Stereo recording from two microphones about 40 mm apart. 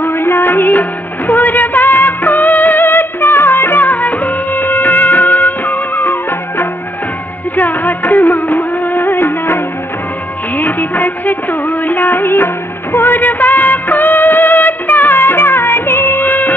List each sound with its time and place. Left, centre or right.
0.0 s music: left
7.5 s music: left
16.3 s music: left